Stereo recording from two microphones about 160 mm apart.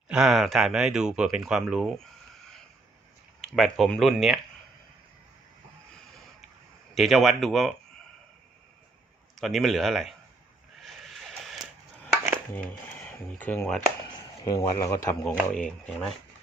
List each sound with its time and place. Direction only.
0.1 s speech: 5° right (ahead or behind)
3.4 s speech: centre (ahead or behind)
6.9 s speech: centre (ahead or behind)
9.4 s speech: centre (ahead or behind)
10.8 s a sound: centre (ahead or behind)
13.1 s speech: 10° left (ahead or behind)
14.4 s speech: 25° left (ahead or behind)
15.4 s speech: 5° left (ahead or behind)